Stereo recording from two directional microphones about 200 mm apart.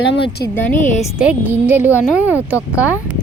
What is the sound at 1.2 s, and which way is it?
Speech, 10° right (ahead or behind).